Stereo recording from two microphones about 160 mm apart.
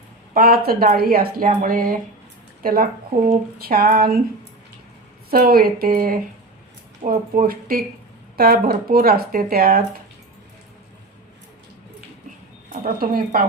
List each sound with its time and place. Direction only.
0.3 s speech: 70° right (ahead or behind)
5.3 s speech: 70° right (ahead or behind)
7.0 s speech: 55° right (ahead or behind)
12.8 s speech: 65° right (ahead or behind)